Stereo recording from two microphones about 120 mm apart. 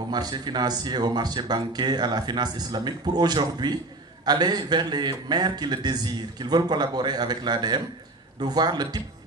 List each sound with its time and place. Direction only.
0.1 s speech: 35° right (ahead or behind)